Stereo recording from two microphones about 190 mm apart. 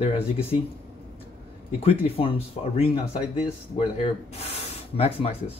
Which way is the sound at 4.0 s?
35° left (ahead or behind).